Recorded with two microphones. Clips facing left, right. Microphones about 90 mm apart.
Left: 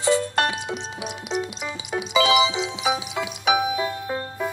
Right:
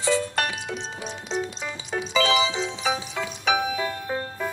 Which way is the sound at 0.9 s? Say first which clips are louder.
Left 1 dB; 10° left (ahead or behind).